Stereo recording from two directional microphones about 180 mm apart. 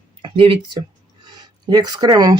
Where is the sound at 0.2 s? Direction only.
30° right (ahead or behind).